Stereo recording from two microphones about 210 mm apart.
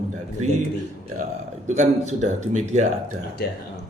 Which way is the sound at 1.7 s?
35° right (ahead or behind).